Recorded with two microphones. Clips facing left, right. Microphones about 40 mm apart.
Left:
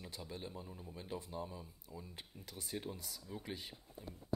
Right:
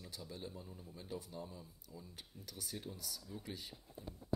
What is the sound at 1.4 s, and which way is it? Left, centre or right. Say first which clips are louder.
Speech: left 3 dB; centre.